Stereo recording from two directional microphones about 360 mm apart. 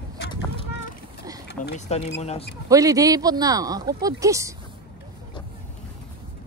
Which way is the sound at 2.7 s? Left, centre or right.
Centre.